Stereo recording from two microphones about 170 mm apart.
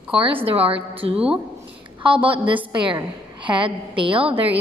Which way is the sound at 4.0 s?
30° right (ahead or behind).